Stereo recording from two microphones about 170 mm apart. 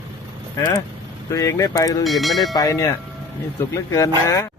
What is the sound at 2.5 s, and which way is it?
Speech, 20° left (ahead or behind).